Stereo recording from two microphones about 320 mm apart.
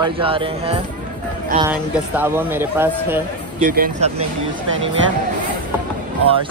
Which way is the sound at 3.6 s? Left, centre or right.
Right.